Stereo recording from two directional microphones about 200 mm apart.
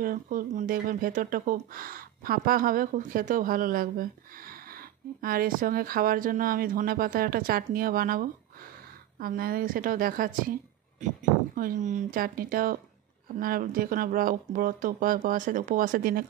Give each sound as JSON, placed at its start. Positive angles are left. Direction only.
{"t": 0.0, "sound": "speech", "side_deg": -45}
{"t": 11.5, "sound": "speech", "side_deg": -40}